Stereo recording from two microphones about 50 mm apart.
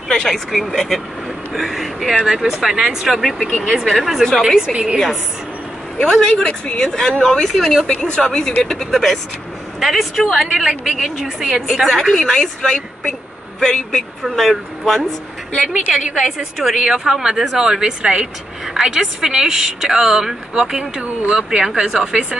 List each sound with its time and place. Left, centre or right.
0.1 s a woman's voice: centre
0.5 s speech: centre
3.2 s speech: centre
5.9 s a woman's voice: centre
6.6 s a woman's voice: left
6.9 s a woman's voice: centre
7.4 s a woman's voice: centre
11.6 s a woman's voice: centre
16.3 s speech: centre